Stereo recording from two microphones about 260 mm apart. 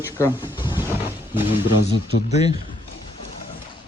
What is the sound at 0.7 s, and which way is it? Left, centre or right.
Vehicle, centre.